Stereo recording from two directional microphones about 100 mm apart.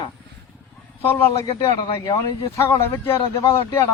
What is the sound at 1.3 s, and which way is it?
Speech, 40° left (ahead or behind).